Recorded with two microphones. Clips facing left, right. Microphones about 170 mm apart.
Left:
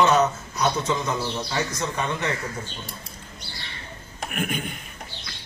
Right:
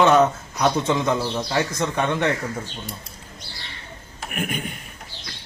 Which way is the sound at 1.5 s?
60° right (ahead or behind).